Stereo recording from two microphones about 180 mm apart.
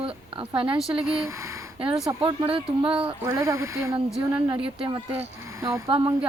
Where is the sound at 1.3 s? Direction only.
15° right (ahead or behind).